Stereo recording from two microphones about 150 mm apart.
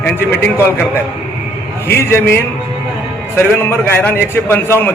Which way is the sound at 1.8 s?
15° left (ahead or behind).